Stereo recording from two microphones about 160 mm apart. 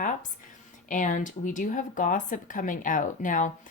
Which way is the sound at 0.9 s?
55° left (ahead or behind).